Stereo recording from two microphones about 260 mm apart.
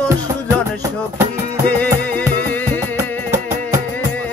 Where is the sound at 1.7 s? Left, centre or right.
Centre.